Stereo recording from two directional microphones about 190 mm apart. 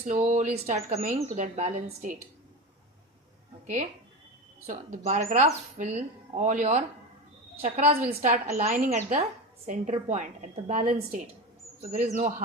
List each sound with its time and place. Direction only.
0.0 s speech: 45° right (ahead or behind)
4.6 s speech: 40° right (ahead or behind)